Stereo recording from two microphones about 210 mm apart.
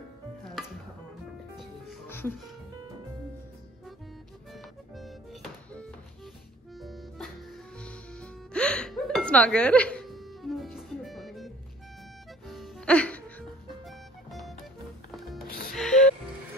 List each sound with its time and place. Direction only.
2.0 s music: 10° left (ahead or behind)
4.6 s music: centre (ahead or behind)
15.4 s music: 45° left (ahead or behind)
15.7 s music: centre (ahead or behind)